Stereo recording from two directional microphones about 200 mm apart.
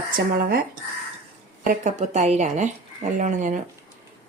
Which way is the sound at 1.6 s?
35° right (ahead or behind).